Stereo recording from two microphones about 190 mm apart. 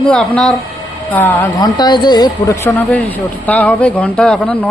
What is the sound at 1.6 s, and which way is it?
Speech, 20° left (ahead or behind).